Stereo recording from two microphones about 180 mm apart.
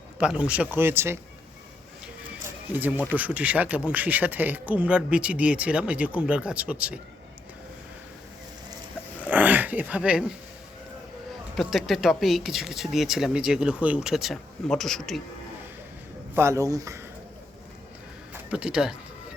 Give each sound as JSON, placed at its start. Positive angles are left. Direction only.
{"t": 0.2, "sound": "speech", "side_deg": -5}
{"t": 3.1, "sound": "speech", "side_deg": -10}
{"t": 9.3, "sound": "dog", "side_deg": -10}
{"t": 11.5, "sound": "speech", "side_deg": 0}
{"t": 16.3, "sound": "speech", "side_deg": -15}
{"t": 18.5, "sound": "speech", "side_deg": -5}